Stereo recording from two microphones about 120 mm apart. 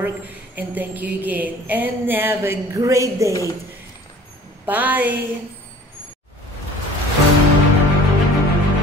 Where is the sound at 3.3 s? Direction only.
25° left (ahead or behind).